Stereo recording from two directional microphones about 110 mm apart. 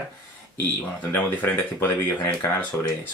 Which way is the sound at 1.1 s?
20° left (ahead or behind).